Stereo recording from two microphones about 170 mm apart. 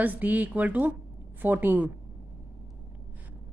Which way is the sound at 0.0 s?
10° right (ahead or behind).